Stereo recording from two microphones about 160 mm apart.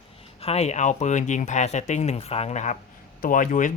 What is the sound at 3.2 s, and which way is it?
Speech, 55° left (ahead or behind).